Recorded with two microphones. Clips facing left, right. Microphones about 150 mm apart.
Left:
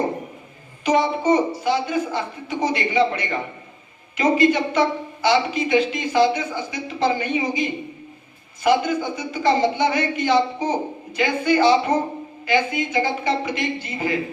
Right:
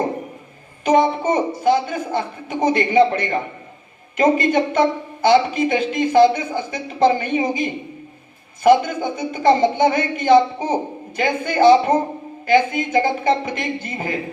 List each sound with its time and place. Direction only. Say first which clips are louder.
0.9 s a woman's voice: right 2 dB; 55° right (ahead or behind)